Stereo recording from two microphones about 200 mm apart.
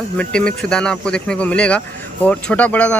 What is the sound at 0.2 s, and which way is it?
Speech, 5° left (ahead or behind).